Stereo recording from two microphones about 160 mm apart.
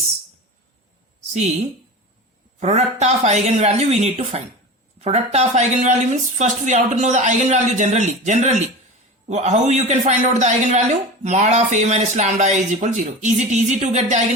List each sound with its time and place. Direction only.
1.3 s a man's voice: 45° right (ahead or behind)